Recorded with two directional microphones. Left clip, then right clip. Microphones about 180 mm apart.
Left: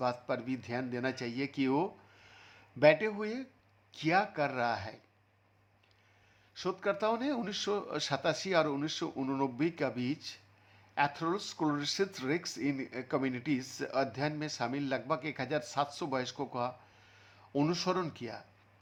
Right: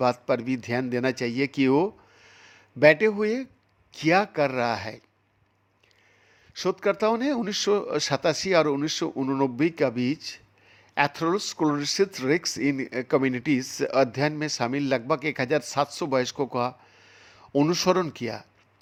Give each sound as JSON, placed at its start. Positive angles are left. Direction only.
{"t": 0.0, "sound": "speech", "side_deg": -45}
{"t": 2.1, "sound": "a sound", "side_deg": -25}
{"t": 3.9, "sound": "speech", "side_deg": -40}
{"t": 6.5, "sound": "speech", "side_deg": -40}
{"t": 9.1, "sound": "speech", "side_deg": -30}